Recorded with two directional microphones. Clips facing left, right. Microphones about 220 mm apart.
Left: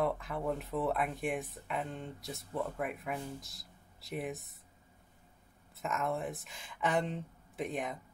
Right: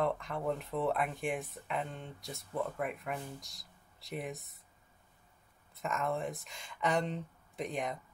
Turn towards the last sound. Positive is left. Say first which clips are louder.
# even
turn(degrees=0)  # may be behind; listen again after turning